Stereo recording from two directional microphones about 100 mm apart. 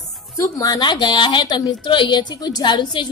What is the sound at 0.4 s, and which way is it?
Speech, 35° left (ahead or behind).